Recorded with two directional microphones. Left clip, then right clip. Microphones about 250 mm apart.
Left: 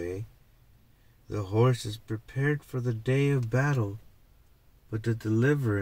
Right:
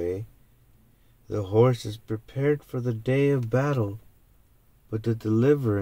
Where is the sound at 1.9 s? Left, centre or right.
Centre.